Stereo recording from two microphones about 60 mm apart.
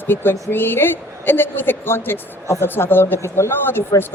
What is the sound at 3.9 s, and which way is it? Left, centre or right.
Speech, left.